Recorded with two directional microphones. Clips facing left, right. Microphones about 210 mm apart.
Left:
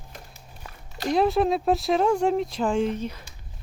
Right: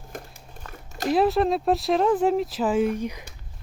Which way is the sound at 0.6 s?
10° left (ahead or behind).